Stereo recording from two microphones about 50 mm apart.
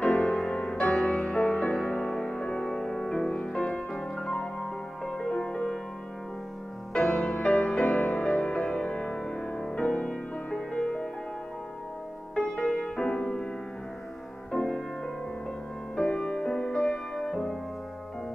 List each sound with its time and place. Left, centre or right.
0.0 s music: centre
2.7 s music: centre
6.9 s music: centre
12.5 s music: centre
14.5 s music: centre
16.0 s music: centre